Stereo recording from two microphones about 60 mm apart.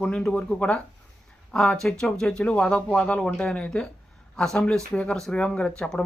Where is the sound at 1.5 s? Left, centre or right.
Centre.